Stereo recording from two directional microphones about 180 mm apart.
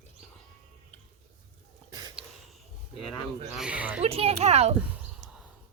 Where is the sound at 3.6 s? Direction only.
5° right (ahead or behind).